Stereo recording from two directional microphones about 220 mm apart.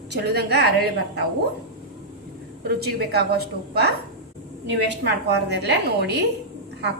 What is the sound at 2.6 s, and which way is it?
A woman's voice, 45° right (ahead or behind).